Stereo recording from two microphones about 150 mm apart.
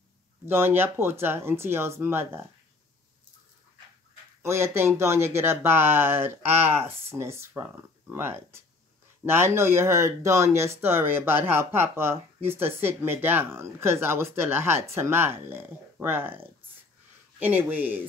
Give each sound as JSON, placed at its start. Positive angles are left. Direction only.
{"t": 0.5, "sound": "speech", "side_deg": -15}
{"t": 4.4, "sound": "speech", "side_deg": -15}